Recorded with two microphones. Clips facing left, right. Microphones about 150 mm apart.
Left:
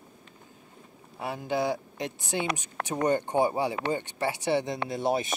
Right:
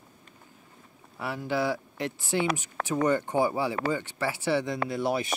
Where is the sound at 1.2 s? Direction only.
20° left (ahead or behind).